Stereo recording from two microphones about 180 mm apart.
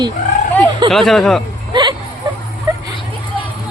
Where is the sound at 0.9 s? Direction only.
Centre (ahead or behind).